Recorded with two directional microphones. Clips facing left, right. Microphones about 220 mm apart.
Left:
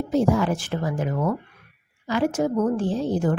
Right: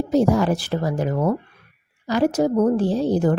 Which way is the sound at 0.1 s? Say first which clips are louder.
Right 3 dB; 40° right (ahead or behind).